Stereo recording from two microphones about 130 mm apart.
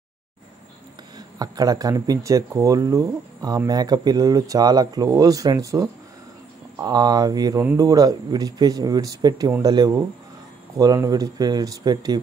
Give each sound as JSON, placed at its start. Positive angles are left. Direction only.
{"t": 1.1, "sound": "speech", "side_deg": -30}